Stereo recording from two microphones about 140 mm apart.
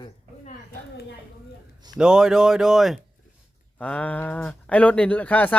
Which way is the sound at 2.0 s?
5° right (ahead or behind).